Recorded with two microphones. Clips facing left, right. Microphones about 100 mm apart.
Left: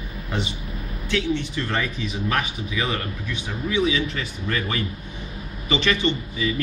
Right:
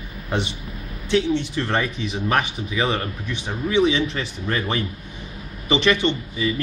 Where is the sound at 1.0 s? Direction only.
20° right (ahead or behind).